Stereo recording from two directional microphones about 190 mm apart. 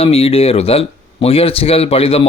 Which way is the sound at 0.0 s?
30° left (ahead or behind).